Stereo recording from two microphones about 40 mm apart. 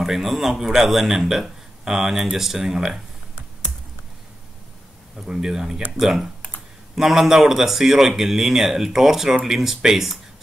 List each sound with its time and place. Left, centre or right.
0.0 s a man's voice: centre
5.3 s a man's voice: centre